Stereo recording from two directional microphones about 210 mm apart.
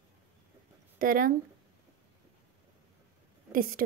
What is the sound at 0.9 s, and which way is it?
Speech, 40° right (ahead or behind).